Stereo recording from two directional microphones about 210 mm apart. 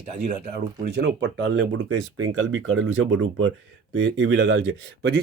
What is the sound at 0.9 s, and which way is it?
Speech, 55° right (ahead or behind).